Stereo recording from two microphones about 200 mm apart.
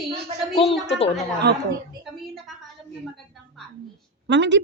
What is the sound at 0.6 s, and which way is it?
Speech, 25° left (ahead or behind).